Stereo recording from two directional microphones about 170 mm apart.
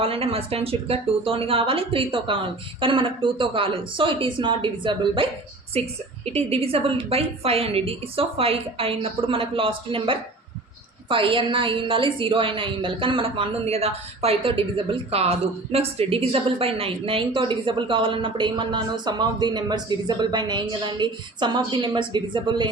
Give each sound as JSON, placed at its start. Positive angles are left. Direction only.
{"t": 0.0, "sound": "a woman's voice", "side_deg": -35}